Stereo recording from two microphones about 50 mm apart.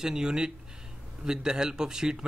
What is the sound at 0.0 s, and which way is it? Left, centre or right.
Speech, centre.